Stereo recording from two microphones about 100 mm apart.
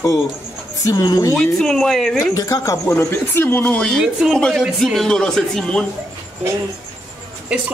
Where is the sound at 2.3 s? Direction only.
30° left (ahead or behind); by 4.0 s 10° left (ahead or behind).